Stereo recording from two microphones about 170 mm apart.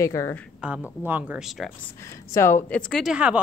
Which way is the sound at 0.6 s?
5° right (ahead or behind).